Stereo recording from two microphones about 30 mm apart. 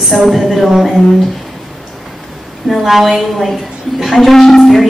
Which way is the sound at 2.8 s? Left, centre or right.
Centre.